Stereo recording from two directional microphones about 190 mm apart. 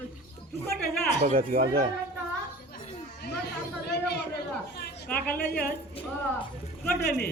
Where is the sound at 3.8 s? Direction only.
60° left (ahead or behind).